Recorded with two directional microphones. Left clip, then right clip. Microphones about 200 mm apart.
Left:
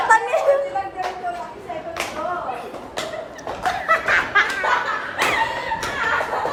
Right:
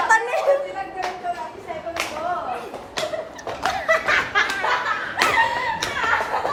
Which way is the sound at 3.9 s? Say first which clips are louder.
Left 2 dB; centre (ahead or behind).